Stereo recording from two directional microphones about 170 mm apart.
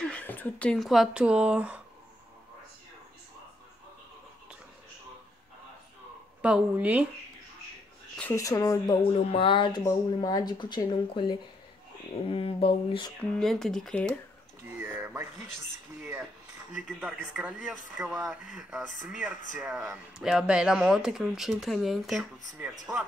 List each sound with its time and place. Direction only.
0.0 s speech: 10° left (ahead or behind); by 1.8 s 5° right (ahead or behind)
6.4 s speech: 5° right (ahead or behind)
8.2 s speech: 15° left (ahead or behind)
9.3 s speech: 30° left (ahead or behind)
12.3 s a sound: 35° left (ahead or behind)
13.3 s speech: centre (ahead or behind)
14.8 s a sound: 15° right (ahead or behind)
16.0 s cutlery: 10° right (ahead or behind)
16.7 s speech: 5° right (ahead or behind)